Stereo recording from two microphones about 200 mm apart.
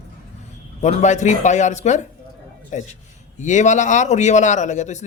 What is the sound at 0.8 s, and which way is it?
A man's voice, 35° left (ahead or behind).